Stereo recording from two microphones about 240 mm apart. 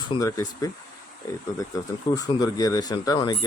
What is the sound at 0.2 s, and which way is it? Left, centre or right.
Speech, centre.